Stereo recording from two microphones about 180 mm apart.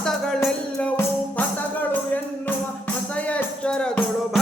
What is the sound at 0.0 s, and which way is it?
Music, 5° left (ahead or behind).